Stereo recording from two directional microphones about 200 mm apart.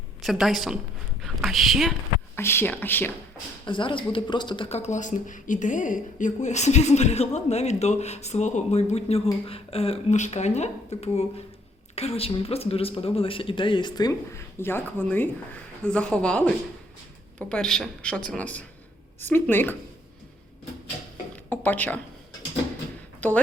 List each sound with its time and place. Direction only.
0.2 s speech: centre (ahead or behind)
2.3 s speech: 10° left (ahead or behind)
3.7 s speech: 25° left (ahead or behind); by 16.5 s 5° left (ahead or behind)
17.5 s speech: 5° left (ahead or behind)
21.5 s speech: 10° left (ahead or behind)
23.2 s speech: 10° left (ahead or behind)